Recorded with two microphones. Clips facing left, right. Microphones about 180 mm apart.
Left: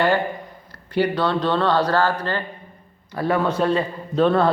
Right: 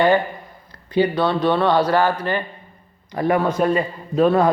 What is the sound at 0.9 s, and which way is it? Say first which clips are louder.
A man's voice: right 2 dB; 10° right (ahead or behind).